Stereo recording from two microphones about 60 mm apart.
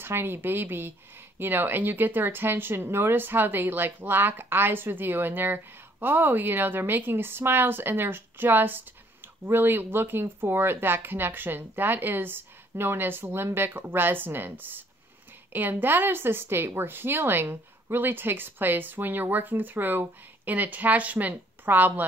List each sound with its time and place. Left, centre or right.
0.0 s speech: right